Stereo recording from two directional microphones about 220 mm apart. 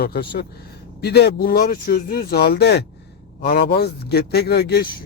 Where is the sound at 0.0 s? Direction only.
45° left (ahead or behind).